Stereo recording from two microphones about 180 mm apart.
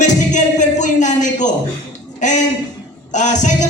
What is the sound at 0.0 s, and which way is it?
Music, 40° left (ahead or behind).